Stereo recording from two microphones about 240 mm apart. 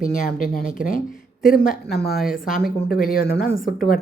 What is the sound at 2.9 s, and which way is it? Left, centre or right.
Speech, left.